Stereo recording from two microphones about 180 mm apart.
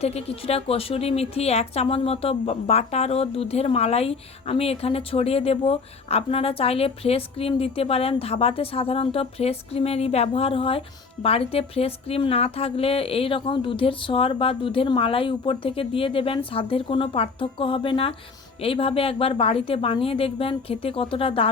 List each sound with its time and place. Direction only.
0.0 s a woman's voice: 35° left (ahead or behind)